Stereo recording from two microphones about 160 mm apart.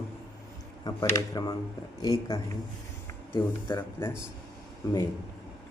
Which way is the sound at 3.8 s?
15° left (ahead or behind).